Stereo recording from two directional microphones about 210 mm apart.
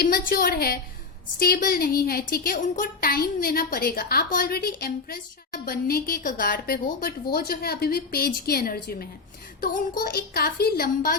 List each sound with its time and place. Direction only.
0.0 s a woman's voice: 45° left (ahead or behind)